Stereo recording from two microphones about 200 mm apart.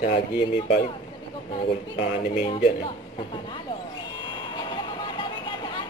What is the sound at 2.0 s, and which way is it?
Speech, 30° left (ahead or behind).